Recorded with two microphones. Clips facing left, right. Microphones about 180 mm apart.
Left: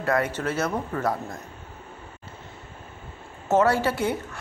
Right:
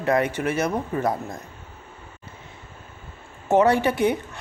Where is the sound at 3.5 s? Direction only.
15° right (ahead or behind).